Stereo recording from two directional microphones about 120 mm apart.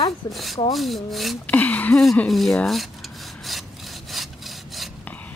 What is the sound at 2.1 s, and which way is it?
Rub, centre (ahead or behind).